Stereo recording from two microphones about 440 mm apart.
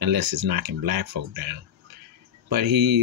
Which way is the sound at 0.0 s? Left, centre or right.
Right.